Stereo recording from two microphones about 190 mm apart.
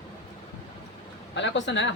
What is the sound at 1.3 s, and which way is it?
Speech, 70° left (ahead or behind).